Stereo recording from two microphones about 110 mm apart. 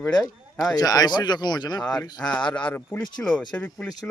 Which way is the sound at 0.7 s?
35° left (ahead or behind).